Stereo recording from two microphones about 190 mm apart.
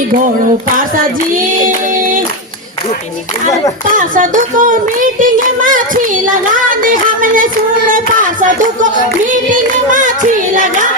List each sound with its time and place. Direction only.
3.8 s child singing: 45° right (ahead or behind)
8.4 s child singing: 45° right (ahead or behind)
10.5 s hands: 45° right (ahead or behind)